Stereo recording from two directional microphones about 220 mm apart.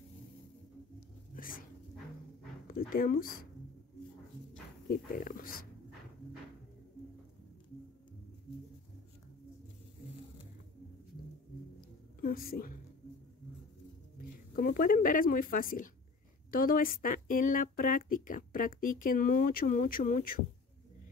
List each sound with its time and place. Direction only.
1.3 s dog: 40° left (ahead or behind)
2.7 s speech: 40° left (ahead or behind)
4.8 s speech: 40° left (ahead or behind)
12.2 s a woman's voice: 40° left (ahead or behind)
14.1 s speech: 40° left (ahead or behind)